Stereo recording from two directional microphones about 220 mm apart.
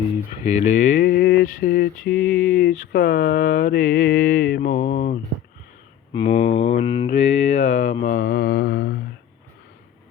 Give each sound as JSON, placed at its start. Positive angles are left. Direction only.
{"t": 0.4, "sound": "mantra", "side_deg": 30}
{"t": 8.0, "sound": "mantra", "side_deg": 40}